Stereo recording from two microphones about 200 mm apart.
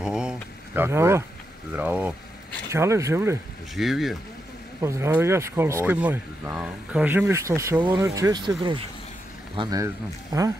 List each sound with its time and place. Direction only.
0.0 s a sound: 5° right (ahead or behind)
1.8 s speech: 5° right (ahead or behind)
3.7 s speech: centre (ahead or behind)
4.8 s speech: 15° right (ahead or behind)